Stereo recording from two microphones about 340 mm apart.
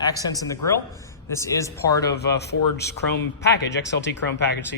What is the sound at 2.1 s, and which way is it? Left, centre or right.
Speech, left.